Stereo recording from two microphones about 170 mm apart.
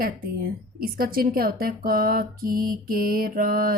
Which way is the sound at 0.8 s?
60° right (ahead or behind).